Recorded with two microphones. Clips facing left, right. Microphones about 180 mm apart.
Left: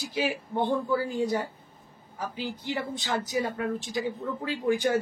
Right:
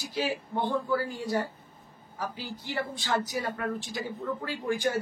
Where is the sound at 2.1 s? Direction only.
20° left (ahead or behind).